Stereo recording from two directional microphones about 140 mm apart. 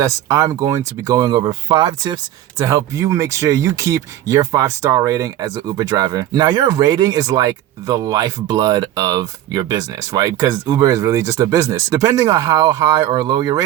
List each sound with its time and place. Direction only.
0.0 s speech: 25° right (ahead or behind)